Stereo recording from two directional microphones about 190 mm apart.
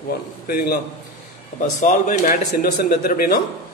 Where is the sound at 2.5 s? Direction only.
55° left (ahead or behind).